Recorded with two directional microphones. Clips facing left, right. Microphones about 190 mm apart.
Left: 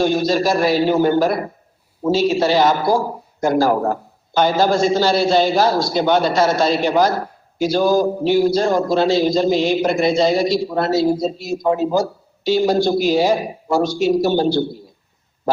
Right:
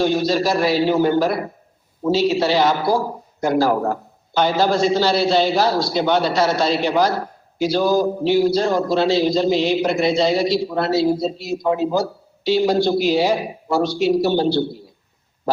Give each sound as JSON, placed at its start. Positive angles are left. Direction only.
{"t": 0.0, "sound": "a man's voice", "side_deg": 50}